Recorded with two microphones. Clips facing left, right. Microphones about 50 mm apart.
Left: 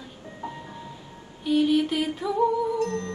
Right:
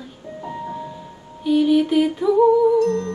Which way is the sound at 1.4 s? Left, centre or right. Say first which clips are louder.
Right 5 dB; centre.